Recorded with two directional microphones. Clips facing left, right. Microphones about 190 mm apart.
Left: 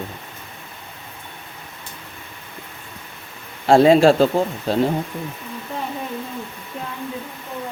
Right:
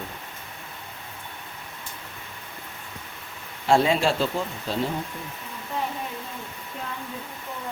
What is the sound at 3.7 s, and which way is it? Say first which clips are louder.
Speech: left 9 dB; 40° left (ahead or behind).